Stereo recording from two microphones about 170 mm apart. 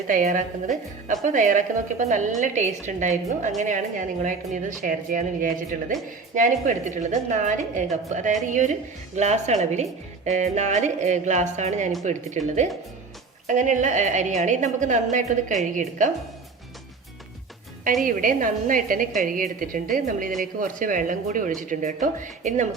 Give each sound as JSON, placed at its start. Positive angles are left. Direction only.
{"t": 0.1, "sound": "a woman's voice", "side_deg": -50}
{"t": 13.5, "sound": "a woman's voice", "side_deg": -45}
{"t": 18.0, "sound": "a woman's voice", "side_deg": -55}